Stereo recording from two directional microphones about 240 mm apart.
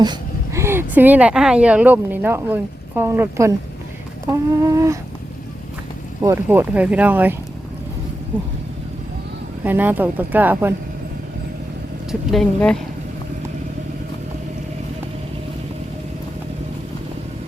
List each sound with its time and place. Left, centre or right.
0.0 s speech: centre
6.2 s speech: centre
9.6 s speech: centre
12.3 s a woman's voice: centre